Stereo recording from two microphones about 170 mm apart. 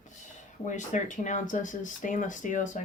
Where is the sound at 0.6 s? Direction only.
45° left (ahead or behind).